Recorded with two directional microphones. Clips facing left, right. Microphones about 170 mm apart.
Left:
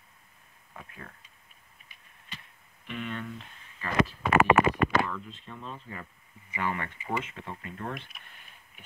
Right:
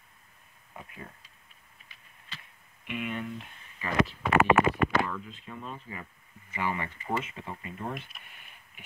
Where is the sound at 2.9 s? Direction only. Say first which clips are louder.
Right 2 dB; 10° right (ahead or behind).